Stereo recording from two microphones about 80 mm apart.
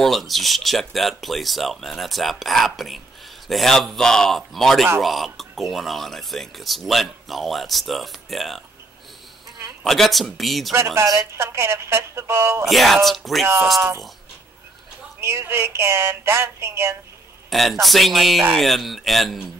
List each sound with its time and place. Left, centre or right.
0.0 s speech: centre
9.8 s speech: centre
11.0 s speech: right
12.6 s speech: centre
15.1 s speech: right
17.5 s speech: centre